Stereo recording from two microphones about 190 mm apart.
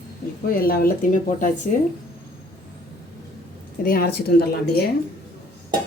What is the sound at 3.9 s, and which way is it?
Speech, 50° left (ahead or behind).